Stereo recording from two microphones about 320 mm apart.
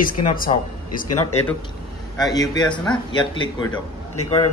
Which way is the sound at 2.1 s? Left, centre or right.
Centre.